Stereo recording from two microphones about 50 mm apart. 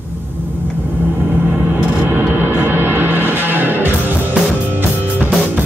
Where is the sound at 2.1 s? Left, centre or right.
Right.